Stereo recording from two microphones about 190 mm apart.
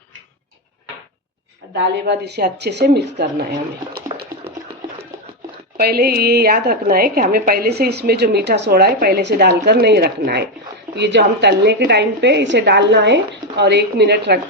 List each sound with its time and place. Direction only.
1.7 s a woman's voice: 65° right (ahead or behind)
5.8 s a woman's voice: 55° right (ahead or behind)